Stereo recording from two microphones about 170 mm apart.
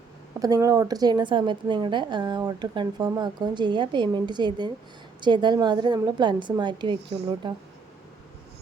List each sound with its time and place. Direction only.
0.3 s a woman's voice: 20° right (ahead or behind)